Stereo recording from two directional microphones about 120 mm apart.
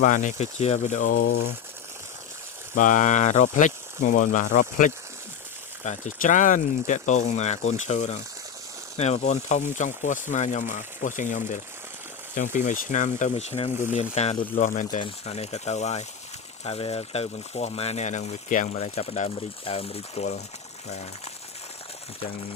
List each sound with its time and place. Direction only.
0.0 s speech: 90° left
2.7 s speech: 90° left; by 14.3 s 65° left (ahead or behind)
14.5 s speech: 90° left
15.3 s speech: 65° left (ahead or behind)
16.6 s speech: 55° left (ahead or behind)